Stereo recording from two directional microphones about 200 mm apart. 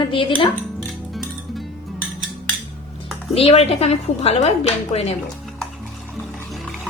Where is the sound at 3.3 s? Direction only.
30° left (ahead or behind).